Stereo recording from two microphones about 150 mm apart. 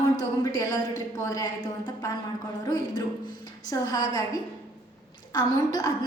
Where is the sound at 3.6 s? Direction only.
25° left (ahead or behind).